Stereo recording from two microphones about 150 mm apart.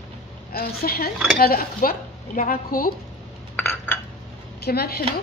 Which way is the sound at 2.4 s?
70° left (ahead or behind).